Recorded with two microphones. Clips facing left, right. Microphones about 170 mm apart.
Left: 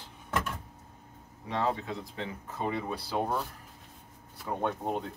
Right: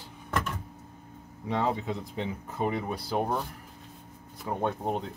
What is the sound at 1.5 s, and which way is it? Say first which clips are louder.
Speech: right 2 dB; 15° right (ahead or behind).